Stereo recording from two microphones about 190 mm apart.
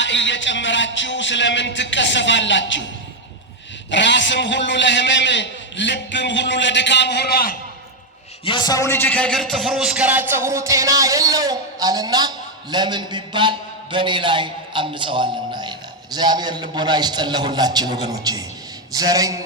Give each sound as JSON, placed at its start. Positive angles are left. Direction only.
{"t": 0.0, "sound": "a man's voice", "side_deg": 75}
{"t": 3.9, "sound": "a man's voice", "side_deg": 70}
{"t": 8.4, "sound": "a man's voice", "side_deg": 20}